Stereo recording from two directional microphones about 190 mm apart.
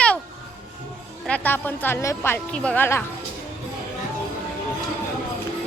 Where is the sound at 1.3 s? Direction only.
10° left (ahead or behind).